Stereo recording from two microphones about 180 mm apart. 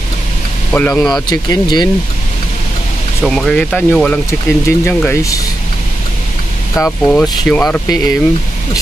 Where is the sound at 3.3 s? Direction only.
5° left (ahead or behind).